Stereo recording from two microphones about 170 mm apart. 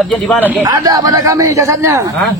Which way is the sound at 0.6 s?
20° right (ahead or behind).